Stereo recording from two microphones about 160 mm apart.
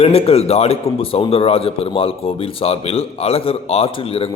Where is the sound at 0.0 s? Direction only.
40° left (ahead or behind).